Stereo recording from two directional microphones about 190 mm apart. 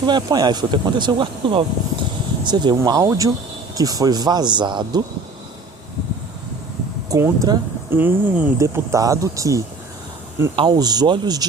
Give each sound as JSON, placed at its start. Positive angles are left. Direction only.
{"t": 0.0, "sound": "speech", "side_deg": -20}
{"t": 7.1, "sound": "speech", "side_deg": -20}
{"t": 7.9, "sound": "speech", "side_deg": -10}